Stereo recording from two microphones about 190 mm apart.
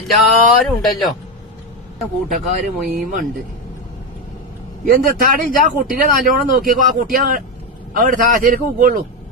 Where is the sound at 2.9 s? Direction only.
45° right (ahead or behind).